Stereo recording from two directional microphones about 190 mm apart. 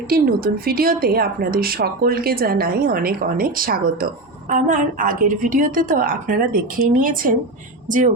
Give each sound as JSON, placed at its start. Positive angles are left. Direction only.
{"t": 0.1, "sound": "a woman's voice", "side_deg": -50}